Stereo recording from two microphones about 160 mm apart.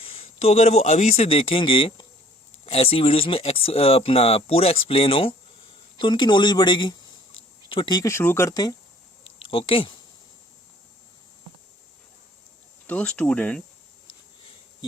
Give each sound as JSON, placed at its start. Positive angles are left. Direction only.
{"t": 0.0, "sound": "speech", "side_deg": 35}
{"t": 9.4, "sound": "speech", "side_deg": 35}
{"t": 12.9, "sound": "speech", "side_deg": 10}